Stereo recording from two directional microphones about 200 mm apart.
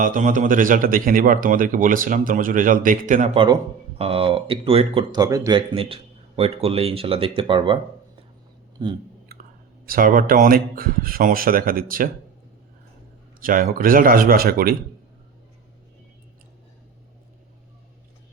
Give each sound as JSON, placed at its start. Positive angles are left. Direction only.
{"t": 0.0, "sound": "speech", "side_deg": -40}
{"t": 3.4, "sound": "speech", "side_deg": -25}
{"t": 8.8, "sound": "speech", "side_deg": -25}
{"t": 9.3, "sound": "a sound", "side_deg": -50}
{"t": 9.8, "sound": "speech", "side_deg": -45}
{"t": 13.4, "sound": "speech", "side_deg": -45}